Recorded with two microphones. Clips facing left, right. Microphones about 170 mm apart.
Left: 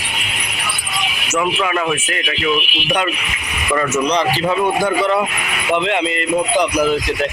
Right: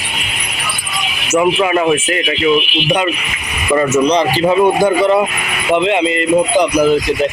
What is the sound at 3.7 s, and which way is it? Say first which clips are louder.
Speech: right 5 dB; 20° right (ahead or behind).